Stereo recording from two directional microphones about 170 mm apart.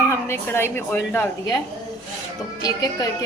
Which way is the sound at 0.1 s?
15° left (ahead or behind).